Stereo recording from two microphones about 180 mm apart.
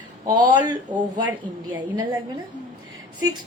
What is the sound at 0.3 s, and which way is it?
Speech, 25° right (ahead or behind).